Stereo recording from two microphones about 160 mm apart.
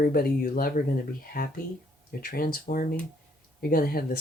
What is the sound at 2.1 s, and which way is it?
Speech, 65° left (ahead or behind).